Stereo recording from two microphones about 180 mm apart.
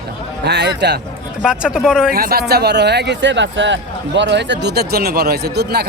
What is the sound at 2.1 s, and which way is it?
Speech, 55° right (ahead or behind).